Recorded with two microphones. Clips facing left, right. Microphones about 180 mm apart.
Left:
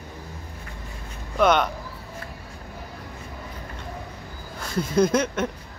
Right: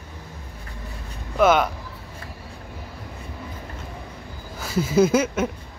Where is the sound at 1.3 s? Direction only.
5° right (ahead or behind).